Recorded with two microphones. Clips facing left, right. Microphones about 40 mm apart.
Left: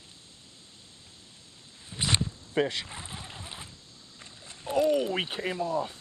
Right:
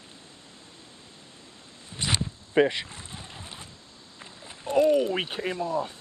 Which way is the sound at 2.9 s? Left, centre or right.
Centre.